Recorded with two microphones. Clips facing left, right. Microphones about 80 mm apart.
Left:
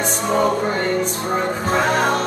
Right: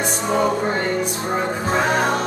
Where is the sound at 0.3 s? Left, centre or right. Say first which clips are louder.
Left 1 dB; centre.